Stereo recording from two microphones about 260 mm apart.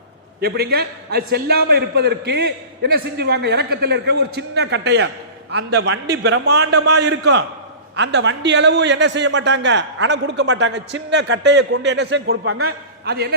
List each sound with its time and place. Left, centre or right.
0.4 s a man's voice: right